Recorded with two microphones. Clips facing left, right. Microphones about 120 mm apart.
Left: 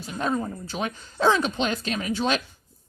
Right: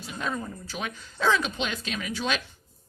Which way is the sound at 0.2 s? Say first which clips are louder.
Left 6 dB; 35° left (ahead or behind).